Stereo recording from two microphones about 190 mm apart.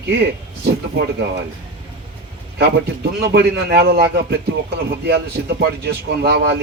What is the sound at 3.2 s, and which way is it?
A man's voice, 60° right (ahead or behind).